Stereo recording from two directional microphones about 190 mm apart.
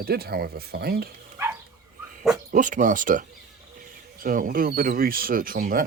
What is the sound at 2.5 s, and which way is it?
Speech, 45° right (ahead or behind).